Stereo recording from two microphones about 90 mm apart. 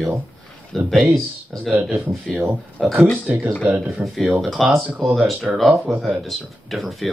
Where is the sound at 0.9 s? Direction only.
Centre (ahead or behind).